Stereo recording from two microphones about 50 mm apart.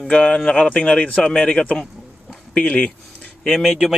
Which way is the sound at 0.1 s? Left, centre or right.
Left.